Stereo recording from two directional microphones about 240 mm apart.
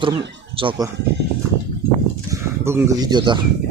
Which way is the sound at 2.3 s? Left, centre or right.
Centre.